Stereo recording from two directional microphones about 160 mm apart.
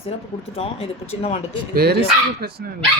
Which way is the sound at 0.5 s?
35° left (ahead or behind).